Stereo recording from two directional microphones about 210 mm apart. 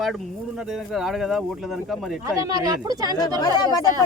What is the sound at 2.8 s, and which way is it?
Speech, 15° right (ahead or behind).